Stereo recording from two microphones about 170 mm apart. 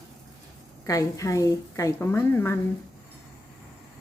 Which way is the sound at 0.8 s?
20° left (ahead or behind).